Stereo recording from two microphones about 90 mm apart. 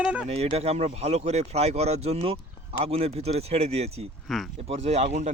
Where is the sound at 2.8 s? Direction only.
90° right.